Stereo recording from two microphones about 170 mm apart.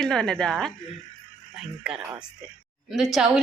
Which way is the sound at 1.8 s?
5° right (ahead or behind).